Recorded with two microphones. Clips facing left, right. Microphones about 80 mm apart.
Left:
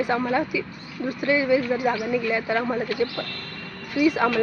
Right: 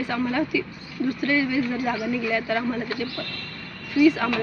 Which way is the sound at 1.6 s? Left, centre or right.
Centre.